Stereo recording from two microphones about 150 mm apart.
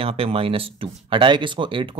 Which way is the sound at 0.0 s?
40° right (ahead or behind).